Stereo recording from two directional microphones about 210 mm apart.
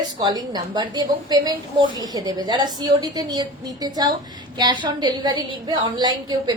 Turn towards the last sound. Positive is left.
turn(degrees=-20)  # may be behind; listen again after turning